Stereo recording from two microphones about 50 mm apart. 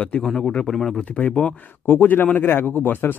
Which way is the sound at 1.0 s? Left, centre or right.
Left.